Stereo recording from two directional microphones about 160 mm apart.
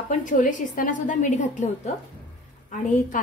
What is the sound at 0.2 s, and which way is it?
A woman's voice, 55° left (ahead or behind).